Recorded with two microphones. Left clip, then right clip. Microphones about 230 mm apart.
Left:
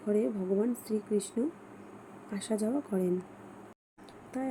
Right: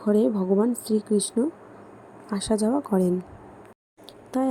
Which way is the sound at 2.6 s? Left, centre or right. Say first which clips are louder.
Right 8 dB; centre.